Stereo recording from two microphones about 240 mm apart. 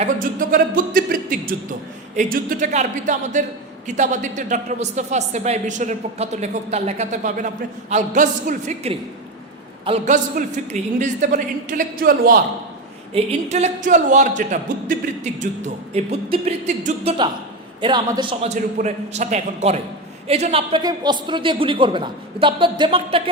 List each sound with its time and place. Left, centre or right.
0.0 s a man's voice: right